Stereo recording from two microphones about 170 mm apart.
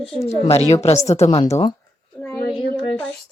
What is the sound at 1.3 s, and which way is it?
Speech, 30° left (ahead or behind).